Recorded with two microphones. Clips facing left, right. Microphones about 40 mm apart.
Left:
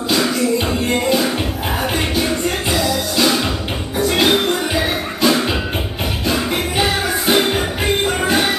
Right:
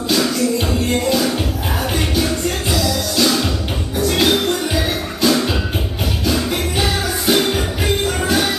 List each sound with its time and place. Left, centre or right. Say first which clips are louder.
0.1 s music: left 1 dB; centre